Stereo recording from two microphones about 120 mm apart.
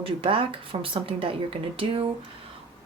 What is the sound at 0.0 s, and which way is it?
Speech, 50° right (ahead or behind).